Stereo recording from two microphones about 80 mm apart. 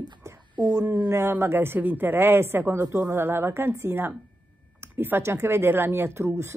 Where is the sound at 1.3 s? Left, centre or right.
Right.